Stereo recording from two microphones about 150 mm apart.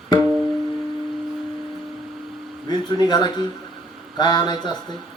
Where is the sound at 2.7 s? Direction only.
25° left (ahead or behind).